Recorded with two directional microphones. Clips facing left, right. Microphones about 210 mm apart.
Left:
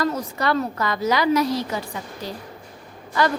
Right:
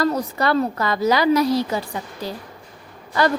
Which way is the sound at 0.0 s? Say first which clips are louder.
Right 3 dB; 35° right (ahead or behind).